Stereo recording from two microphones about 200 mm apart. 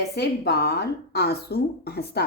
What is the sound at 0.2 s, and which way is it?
A woman's voice, 55° left (ahead or behind).